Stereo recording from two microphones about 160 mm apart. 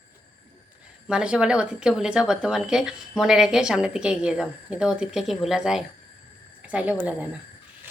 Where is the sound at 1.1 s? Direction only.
5° right (ahead or behind).